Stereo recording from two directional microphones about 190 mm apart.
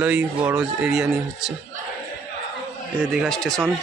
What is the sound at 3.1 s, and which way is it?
Speech, centre (ahead or behind).